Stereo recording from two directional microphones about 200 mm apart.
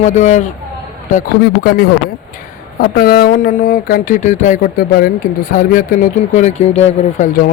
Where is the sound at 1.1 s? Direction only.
45° left (ahead or behind).